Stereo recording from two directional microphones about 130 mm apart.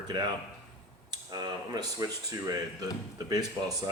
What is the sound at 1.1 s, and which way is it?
Speech, 35° right (ahead or behind).